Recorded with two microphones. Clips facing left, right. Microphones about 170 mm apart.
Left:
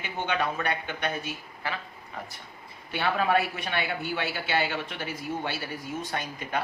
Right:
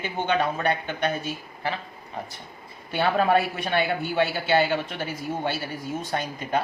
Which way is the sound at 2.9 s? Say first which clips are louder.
Right 4 dB; 40° right (ahead or behind).